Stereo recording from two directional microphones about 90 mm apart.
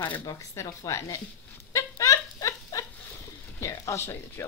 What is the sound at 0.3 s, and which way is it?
Speech, 35° left (ahead or behind).